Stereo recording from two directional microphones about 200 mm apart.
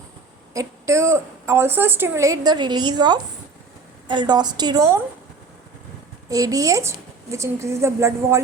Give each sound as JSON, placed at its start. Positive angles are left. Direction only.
{"t": 0.5, "sound": "a woman's voice", "side_deg": -15}
{"t": 6.2, "sound": "a woman's voice", "side_deg": -15}